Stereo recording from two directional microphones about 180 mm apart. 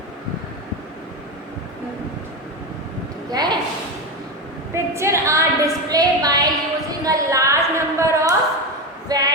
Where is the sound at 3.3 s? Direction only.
20° right (ahead or behind).